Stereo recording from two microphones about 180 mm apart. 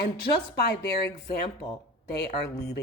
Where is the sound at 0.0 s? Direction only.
65° left (ahead or behind).